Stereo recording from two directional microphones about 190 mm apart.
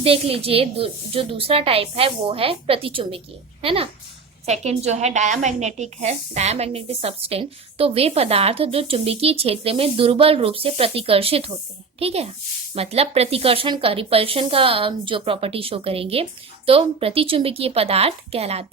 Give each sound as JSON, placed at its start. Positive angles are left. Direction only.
{"t": 0.0, "sound": "a woman's voice", "side_deg": -30}